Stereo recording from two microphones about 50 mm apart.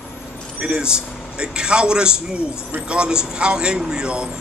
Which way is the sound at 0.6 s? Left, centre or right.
Centre.